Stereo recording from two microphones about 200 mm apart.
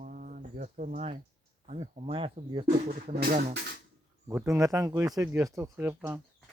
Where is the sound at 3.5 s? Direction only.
55° right (ahead or behind).